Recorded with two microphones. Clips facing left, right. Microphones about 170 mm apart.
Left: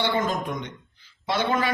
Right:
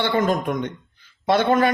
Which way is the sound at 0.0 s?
55° right (ahead or behind).